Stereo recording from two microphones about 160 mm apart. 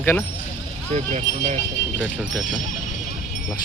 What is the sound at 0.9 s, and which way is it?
Speech, 45° right (ahead or behind).